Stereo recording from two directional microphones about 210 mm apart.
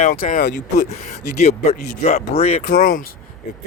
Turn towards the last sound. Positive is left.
turn(degrees=40)  # may be behind; listen again after turning